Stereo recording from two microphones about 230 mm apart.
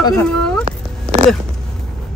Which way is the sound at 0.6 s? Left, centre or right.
Right.